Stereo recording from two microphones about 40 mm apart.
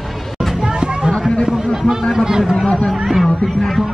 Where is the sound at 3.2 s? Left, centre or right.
Centre.